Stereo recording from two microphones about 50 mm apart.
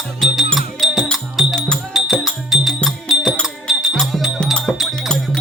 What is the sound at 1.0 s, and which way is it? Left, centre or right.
Music, centre.